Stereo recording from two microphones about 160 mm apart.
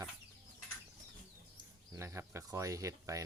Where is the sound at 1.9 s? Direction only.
15° right (ahead or behind).